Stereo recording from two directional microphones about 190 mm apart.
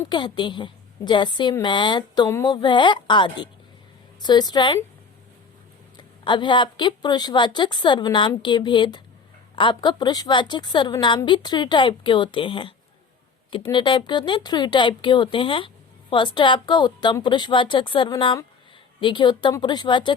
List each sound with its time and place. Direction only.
0.1 s speech: 25° left (ahead or behind)
6.0 s speech: 25° left (ahead or behind)